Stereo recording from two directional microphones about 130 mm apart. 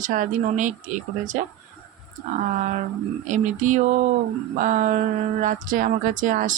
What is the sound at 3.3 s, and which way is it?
Speech, 75° right (ahead or behind).